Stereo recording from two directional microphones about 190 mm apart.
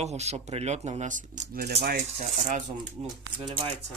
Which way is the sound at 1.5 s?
55° right (ahead or behind).